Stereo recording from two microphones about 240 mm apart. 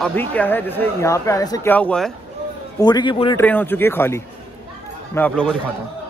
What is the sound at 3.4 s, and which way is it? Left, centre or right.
A man's voice, centre.